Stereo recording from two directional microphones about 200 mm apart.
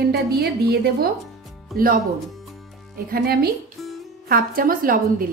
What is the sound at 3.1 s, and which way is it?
Speech, 50° right (ahead or behind).